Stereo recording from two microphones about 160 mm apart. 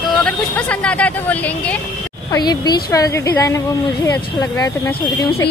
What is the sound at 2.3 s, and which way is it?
A woman's voice, 25° left (ahead or behind).